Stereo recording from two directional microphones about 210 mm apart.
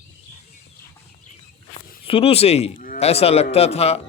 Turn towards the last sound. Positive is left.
turn(degrees=30)  # may be behind; listen again after turning